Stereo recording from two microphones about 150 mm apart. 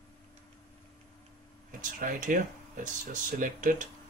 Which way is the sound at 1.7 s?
65° right (ahead or behind).